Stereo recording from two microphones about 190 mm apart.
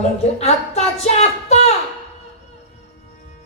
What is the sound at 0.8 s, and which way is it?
Speech, 35° left (ahead or behind).